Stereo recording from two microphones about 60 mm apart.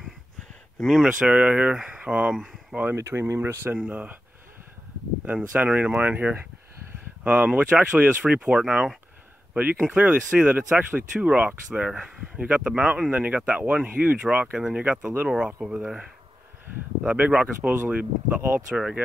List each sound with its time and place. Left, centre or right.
0.8 s speech: centre
1.2 s speech: right
3.0 s speech: right
3.7 s speech: right
5.2 s speech: right
9.5 s speech: right
15.2 s speech: centre
17.0 s speech: centre
18.8 s speech: centre